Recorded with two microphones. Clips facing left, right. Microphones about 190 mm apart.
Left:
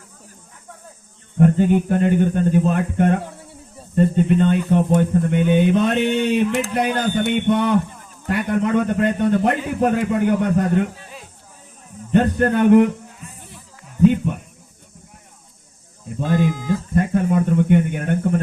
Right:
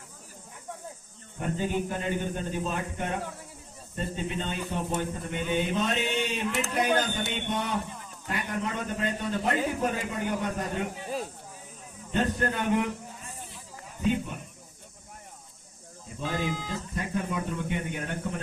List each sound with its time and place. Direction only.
1.4 s speech: 60° left (ahead or behind)
12.1 s speech: 60° left (ahead or behind)
16.2 s speech: 50° left (ahead or behind)